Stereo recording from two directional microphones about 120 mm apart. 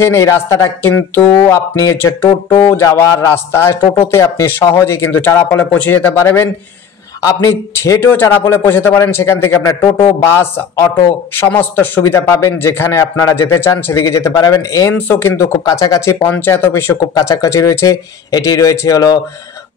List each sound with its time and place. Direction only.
0.0 s a man's voice: 25° left (ahead or behind)
1.4 s a man's voice: 25° left (ahead or behind)
3.8 s speech: 50° left (ahead or behind)
4.1 s a man's voice: 25° left (ahead or behind)
5.6 s a man's voice: 15° left (ahead or behind); by 14.9 s 30° left (ahead or behind)
15.0 s a man's voice: 20° left (ahead or behind)